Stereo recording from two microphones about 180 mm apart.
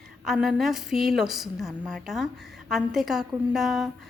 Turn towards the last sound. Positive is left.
turn(degrees=0)  # may be behind; listen again after turning